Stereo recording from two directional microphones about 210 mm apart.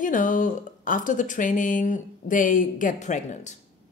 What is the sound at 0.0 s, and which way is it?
Speech, 40° left (ahead or behind).